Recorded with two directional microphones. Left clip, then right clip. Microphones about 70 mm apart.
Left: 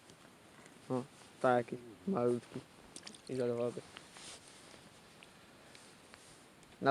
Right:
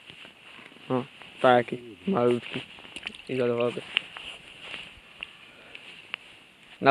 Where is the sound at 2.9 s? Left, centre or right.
Right.